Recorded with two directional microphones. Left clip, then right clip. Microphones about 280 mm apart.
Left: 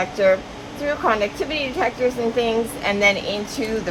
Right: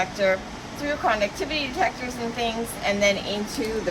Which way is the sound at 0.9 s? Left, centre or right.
Left.